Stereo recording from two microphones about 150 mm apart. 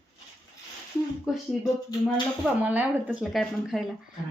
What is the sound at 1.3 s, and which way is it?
Speech, 5° right (ahead or behind).